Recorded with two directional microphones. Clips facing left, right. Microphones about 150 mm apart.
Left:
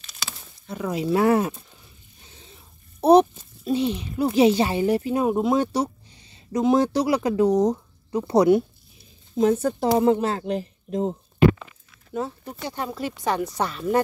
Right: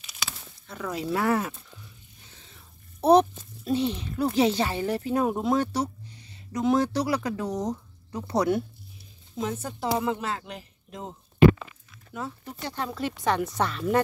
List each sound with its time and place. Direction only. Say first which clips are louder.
0.7 s speech: left 5 dB; 15° left (ahead or behind)
7.5 s speech: left 9 dB; 35° left (ahead or behind)
8.1 s speech: left 8 dB; 20° left (ahead or behind)
9.4 s speech: left 10 dB; 40° left (ahead or behind)
12.4 s speech: left 3 dB; 10° left (ahead or behind)